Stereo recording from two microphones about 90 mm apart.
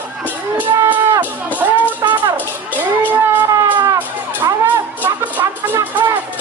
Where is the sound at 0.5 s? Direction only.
20° right (ahead or behind).